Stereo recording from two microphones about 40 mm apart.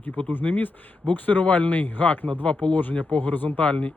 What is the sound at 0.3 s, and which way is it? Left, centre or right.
Speech, left.